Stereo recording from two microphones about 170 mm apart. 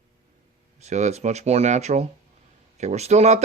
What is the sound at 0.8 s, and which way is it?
Speech, 40° right (ahead or behind).